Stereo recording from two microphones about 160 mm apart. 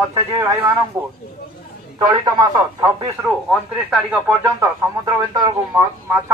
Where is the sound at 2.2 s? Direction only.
25° right (ahead or behind).